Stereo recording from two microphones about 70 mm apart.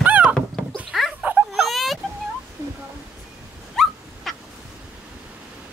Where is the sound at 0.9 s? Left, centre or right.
Centre.